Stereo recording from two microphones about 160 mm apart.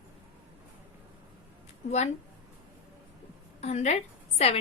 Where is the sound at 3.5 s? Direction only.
45° left (ahead or behind).